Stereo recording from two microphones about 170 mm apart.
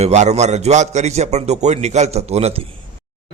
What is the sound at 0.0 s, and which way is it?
A man's voice, 40° right (ahead or behind).